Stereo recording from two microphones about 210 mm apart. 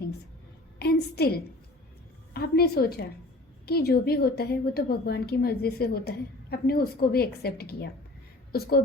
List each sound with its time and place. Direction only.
0.8 s a woman's voice: 50° left (ahead or behind)
2.3 s a woman's voice: 45° left (ahead or behind)